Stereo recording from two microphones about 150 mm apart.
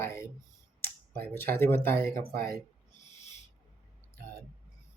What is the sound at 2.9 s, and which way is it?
Owl, 50° left (ahead or behind).